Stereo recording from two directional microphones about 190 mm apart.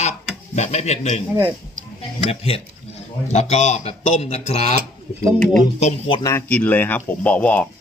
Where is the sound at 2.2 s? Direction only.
30° left (ahead or behind).